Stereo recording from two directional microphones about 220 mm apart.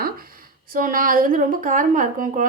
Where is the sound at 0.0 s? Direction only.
40° right (ahead or behind).